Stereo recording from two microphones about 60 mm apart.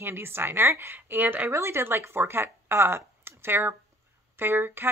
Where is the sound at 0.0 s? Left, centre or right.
Right.